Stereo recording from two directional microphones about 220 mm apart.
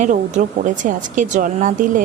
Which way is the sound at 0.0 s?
35° right (ahead or behind).